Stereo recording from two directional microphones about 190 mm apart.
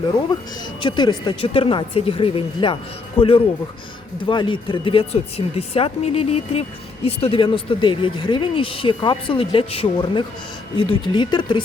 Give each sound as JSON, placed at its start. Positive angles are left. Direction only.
{"t": 0.3, "sound": "speech", "side_deg": 25}